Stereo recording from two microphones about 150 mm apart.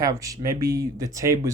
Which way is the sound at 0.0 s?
20° right (ahead or behind).